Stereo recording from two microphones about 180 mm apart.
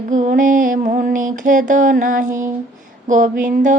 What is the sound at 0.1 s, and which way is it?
Mantra, 45° right (ahead or behind).